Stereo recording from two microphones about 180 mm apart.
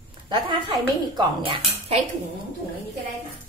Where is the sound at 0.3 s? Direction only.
25° right (ahead or behind).